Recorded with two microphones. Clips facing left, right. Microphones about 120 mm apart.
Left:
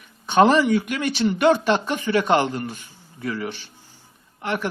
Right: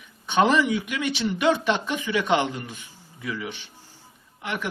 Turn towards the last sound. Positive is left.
turn(degrees=35)  # may be behind; listen again after turning